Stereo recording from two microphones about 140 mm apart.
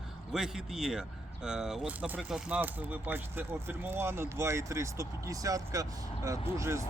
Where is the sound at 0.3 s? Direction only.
5° right (ahead or behind).